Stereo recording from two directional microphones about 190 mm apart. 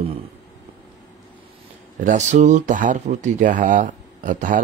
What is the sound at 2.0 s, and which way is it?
Speech, 40° right (ahead or behind).